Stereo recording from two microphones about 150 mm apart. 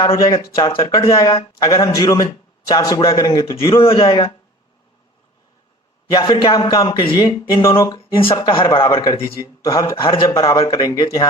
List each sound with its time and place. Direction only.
0.2 s a man's voice: 25° left (ahead or behind)
3.8 s speech: 40° left (ahead or behind)
6.1 s a man's voice: 30° left (ahead or behind)
8.2 s speech: 35° left (ahead or behind)
9.6 s a man's voice: 20° left (ahead or behind)